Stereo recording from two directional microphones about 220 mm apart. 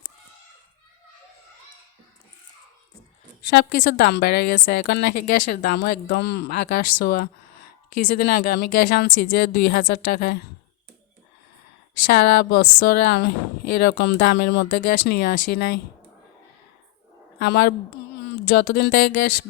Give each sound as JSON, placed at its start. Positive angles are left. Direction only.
{"t": 3.5, "sound": "a woman's voice", "side_deg": 45}
{"t": 12.0, "sound": "a woman's voice", "side_deg": 45}
{"t": 17.4, "sound": "a woman's voice", "side_deg": 45}